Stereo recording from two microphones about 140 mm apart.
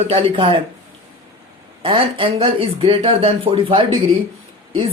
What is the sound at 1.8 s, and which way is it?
Speech, 40° right (ahead or behind).